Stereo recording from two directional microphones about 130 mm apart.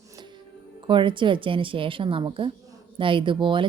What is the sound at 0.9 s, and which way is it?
Speech, 40° right (ahead or behind).